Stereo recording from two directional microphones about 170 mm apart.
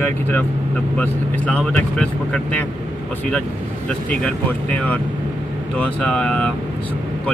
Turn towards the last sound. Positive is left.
turn(degrees=5)  # may be behind; listen again after turning